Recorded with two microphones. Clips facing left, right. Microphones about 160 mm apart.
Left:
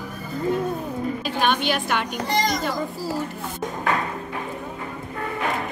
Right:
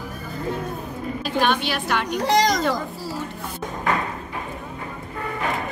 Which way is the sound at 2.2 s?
90° right.